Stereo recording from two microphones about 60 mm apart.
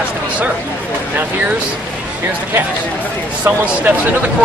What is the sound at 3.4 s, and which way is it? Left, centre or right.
Speech, right.